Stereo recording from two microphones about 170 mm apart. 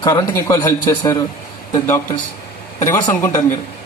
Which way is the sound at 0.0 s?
20° left (ahead or behind).